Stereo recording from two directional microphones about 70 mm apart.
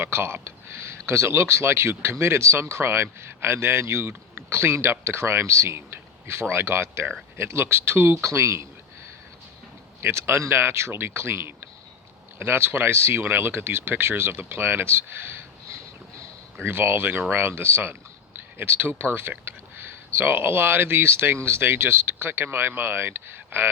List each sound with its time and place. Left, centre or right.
0.0 s speech: right
10.0 s speech: right